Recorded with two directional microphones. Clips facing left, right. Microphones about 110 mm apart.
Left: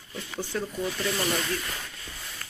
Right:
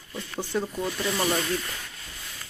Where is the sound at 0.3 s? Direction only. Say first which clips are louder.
Right 2 dB; 15° right (ahead or behind).